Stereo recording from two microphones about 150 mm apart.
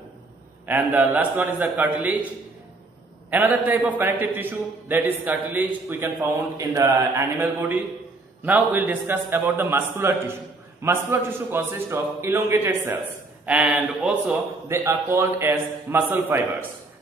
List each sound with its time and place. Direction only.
0.7 s a man's voice: 10° right (ahead or behind)
3.3 s a man's voice: 10° right (ahead or behind)
14.7 s a man's voice: 20° right (ahead or behind)